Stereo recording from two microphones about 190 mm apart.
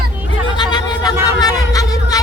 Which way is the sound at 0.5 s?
25° left (ahead or behind).